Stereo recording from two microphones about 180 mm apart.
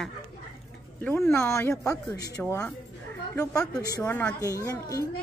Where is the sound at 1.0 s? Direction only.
15° left (ahead or behind).